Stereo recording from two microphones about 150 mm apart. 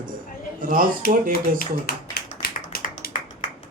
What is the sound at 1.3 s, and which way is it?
Tap, 75° left (ahead or behind).